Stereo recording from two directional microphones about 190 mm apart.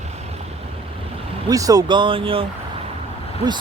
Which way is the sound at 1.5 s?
20° right (ahead or behind).